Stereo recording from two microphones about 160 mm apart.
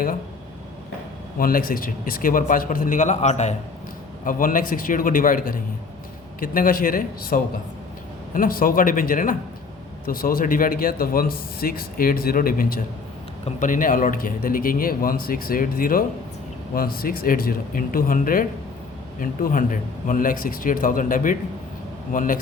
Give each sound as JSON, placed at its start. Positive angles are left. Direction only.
{"t": 1.4, "sound": "speech", "side_deg": 65}
{"t": 4.3, "sound": "a man's voice", "side_deg": 60}